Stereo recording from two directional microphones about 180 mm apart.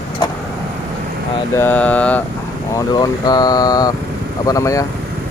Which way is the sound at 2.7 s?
20° left (ahead or behind).